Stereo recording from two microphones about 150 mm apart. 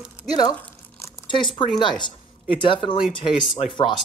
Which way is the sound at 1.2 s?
35° left (ahead or behind).